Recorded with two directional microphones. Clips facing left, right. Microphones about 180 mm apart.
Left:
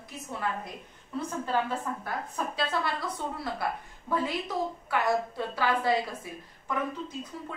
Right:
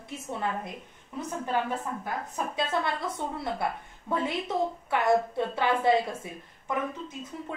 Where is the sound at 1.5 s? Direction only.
15° right (ahead or behind).